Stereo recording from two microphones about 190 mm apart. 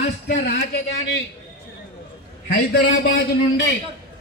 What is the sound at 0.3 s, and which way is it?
Speech, 40° left (ahead or behind).